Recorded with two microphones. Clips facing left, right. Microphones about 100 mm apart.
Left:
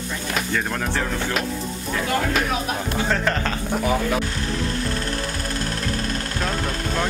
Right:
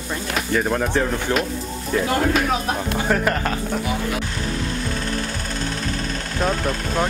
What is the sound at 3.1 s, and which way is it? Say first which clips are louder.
Speech: right 3 dB; 10° right (ahead or behind).